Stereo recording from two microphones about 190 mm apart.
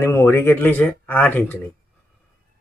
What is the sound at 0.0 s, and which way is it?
A man's voice, 15° left (ahead or behind).